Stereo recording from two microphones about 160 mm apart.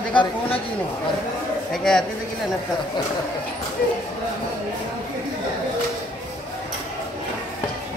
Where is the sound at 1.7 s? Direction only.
5° left (ahead or behind).